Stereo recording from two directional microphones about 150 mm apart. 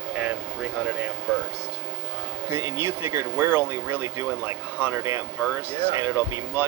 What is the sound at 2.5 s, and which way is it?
Speech, 15° right (ahead or behind).